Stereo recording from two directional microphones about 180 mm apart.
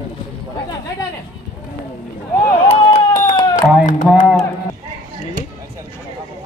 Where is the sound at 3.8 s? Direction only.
45° left (ahead or behind).